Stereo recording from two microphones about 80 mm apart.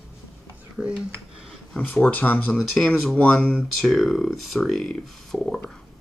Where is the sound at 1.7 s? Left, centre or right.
Centre.